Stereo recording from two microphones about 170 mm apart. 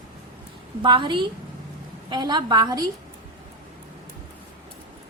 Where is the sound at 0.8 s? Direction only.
30° right (ahead or behind).